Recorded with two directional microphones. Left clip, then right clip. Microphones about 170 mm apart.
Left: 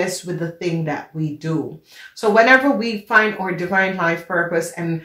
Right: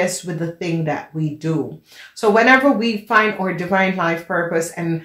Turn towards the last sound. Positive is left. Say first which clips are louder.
# even
turn(degrees=-40)  # may be behind; listen again after turning